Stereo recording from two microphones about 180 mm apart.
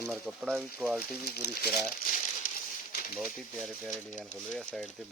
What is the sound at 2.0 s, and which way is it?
Crumpling, 50° left (ahead or behind).